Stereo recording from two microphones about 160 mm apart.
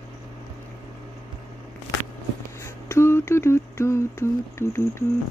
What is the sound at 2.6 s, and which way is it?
Humming, 15° left (ahead or behind).